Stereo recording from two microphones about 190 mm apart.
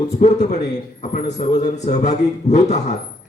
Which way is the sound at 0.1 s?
40° left (ahead or behind).